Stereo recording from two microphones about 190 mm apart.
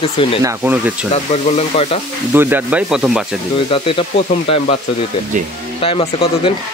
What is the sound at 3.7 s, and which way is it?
Speech, 25° left (ahead or behind).